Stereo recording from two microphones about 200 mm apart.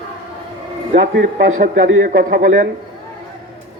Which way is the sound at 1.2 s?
45° right (ahead or behind).